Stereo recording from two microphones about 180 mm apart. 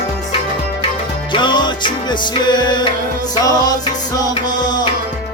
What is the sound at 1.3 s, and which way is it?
Music, 25° left (ahead or behind).